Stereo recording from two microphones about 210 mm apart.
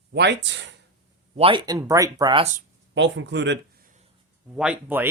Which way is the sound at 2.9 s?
60° right (ahead or behind).